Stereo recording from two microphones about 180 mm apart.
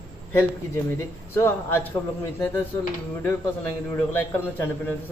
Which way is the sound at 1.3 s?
15° left (ahead or behind).